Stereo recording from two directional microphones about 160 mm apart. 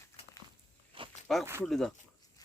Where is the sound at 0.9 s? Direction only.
30° right (ahead or behind).